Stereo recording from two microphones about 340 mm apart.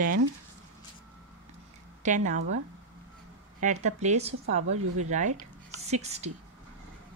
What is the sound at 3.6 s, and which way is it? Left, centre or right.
Speech, right.